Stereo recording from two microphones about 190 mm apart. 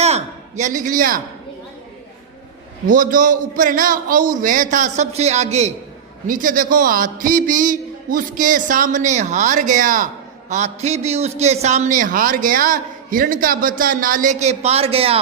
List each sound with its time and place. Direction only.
0.0 s a sound: 35° right (ahead or behind)
2.8 s a man's voice: 45° right (ahead or behind)
6.2 s a man's voice: 45° right (ahead or behind)